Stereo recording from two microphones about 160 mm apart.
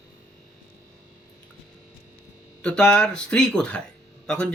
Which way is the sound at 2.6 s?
5° left (ahead or behind).